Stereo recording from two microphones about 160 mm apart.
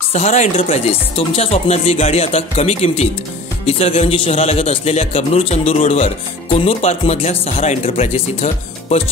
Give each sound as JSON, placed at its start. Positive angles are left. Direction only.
{"t": 0.1, "sound": "a man's voice", "side_deg": 45}